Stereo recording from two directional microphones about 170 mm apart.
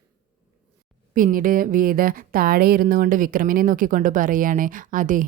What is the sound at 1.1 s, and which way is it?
Speech, 55° right (ahead or behind).